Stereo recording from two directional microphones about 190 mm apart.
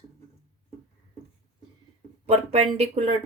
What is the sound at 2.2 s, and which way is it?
Speech, 35° right (ahead or behind).